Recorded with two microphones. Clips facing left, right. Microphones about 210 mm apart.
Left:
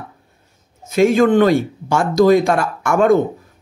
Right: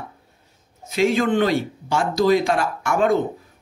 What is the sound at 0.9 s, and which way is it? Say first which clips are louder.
Speech: left 6 dB; 50° left (ahead or behind).